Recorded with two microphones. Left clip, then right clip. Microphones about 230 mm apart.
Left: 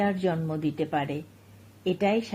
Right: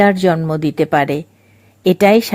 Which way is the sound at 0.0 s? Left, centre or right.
Right.